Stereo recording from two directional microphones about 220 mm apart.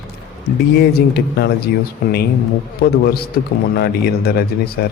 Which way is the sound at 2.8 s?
45° left (ahead or behind).